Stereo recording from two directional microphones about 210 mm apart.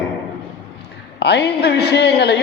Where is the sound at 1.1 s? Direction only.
55° left (ahead or behind).